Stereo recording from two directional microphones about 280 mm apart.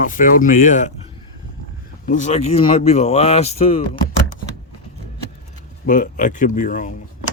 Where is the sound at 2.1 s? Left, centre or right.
Left.